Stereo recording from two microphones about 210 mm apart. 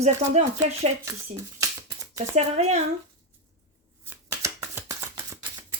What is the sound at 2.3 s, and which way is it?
Speech, 30° right (ahead or behind).